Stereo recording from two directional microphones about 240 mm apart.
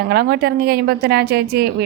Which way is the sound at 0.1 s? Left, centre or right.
Right.